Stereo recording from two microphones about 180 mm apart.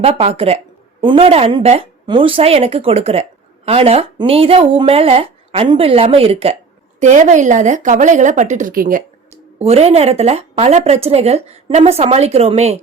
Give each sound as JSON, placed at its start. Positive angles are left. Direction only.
{"t": 0.0, "sound": "a woman's voice", "side_deg": -35}
{"t": 9.3, "sound": "speech", "side_deg": -35}